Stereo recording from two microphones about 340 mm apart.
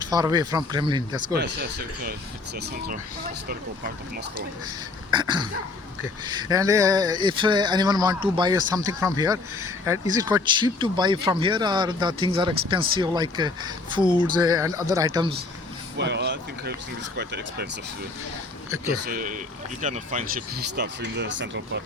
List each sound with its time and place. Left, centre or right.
0.1 s speech: centre
2.6 s speech: right
5.1 s speech: centre
16.0 s speech: right
19.0 s speech: right